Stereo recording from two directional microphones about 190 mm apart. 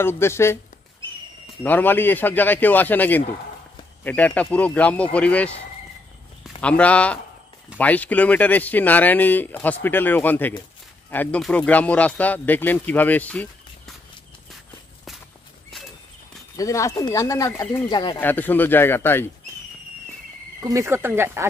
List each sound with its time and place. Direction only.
0.0 s speech: 15° left (ahead or behind)
1.6 s speech: 10° left (ahead or behind)
6.6 s speech: 5° left (ahead or behind)
16.5 s speech: 15° left (ahead or behind)
18.2 s speech: 10° left (ahead or behind)
20.6 s speech: 15° right (ahead or behind)